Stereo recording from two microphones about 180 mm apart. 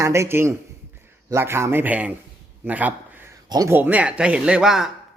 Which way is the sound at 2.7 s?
10° right (ahead or behind).